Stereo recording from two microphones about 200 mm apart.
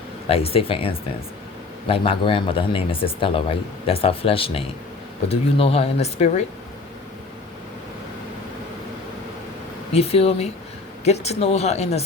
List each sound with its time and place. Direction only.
0.3 s speech: 30° left (ahead or behind)
9.9 s speech: 30° left (ahead or behind)